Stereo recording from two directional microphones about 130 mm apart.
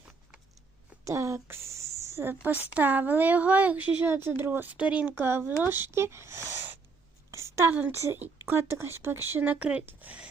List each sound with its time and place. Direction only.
1.0 s a woman's voice: 25° right (ahead or behind)